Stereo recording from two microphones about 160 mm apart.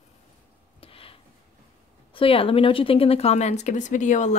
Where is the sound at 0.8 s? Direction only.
35° left (ahead or behind).